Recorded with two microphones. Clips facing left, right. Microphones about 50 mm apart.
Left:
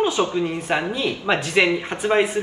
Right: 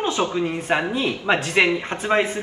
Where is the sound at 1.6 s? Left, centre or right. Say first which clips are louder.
Left 1 dB; centre.